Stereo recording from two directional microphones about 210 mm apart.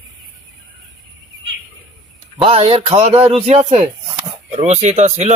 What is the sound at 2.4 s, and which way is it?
A man's voice, 25° right (ahead or behind).